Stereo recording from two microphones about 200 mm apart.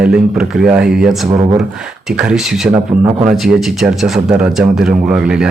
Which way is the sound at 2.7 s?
15° right (ahead or behind).